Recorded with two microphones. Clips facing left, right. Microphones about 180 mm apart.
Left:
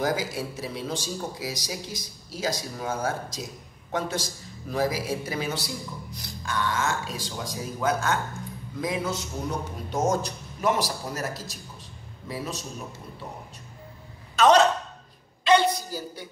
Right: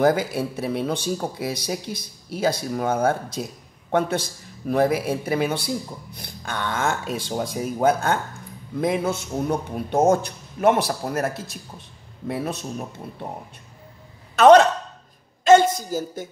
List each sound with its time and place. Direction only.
0.0 s speech: 60° right (ahead or behind)
14.3 s a woman's voice: 55° right (ahead or behind)
15.4 s a sound: 45° right (ahead or behind)